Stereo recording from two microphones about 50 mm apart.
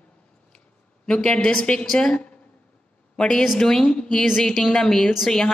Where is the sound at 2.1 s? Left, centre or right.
Left.